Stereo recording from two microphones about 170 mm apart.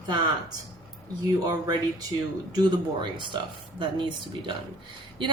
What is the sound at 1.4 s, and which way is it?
Speech, 20° right (ahead or behind).